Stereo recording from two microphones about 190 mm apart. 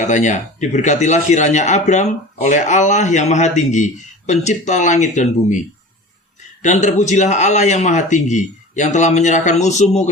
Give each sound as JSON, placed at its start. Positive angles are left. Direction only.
{"t": 0.0, "sound": "speech", "side_deg": 40}
{"t": 6.6, "sound": "speech", "side_deg": 40}